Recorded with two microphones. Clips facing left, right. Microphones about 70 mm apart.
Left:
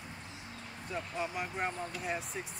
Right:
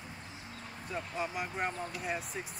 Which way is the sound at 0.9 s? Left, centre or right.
Centre.